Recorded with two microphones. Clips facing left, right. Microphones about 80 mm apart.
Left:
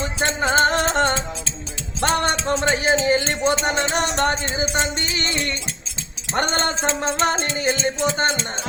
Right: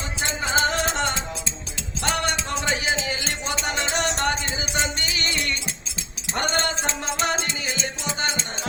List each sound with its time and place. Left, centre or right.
0.0 s music: left
2.0 s a sound: left
6.3 s music: left